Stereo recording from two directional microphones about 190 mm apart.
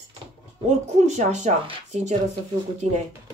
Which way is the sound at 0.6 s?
35° right (ahead or behind).